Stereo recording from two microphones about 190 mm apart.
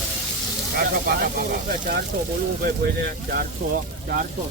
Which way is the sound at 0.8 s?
50° right (ahead or behind).